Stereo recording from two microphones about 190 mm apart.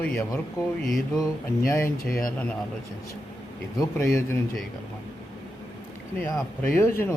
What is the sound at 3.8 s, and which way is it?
Speech, 15° left (ahead or behind).